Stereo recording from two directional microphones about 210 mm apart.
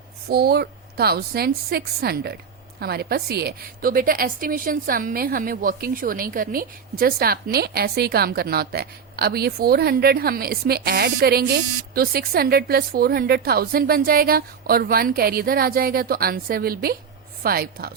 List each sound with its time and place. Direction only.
0.3 s a woman's voice: 50° right (ahead or behind)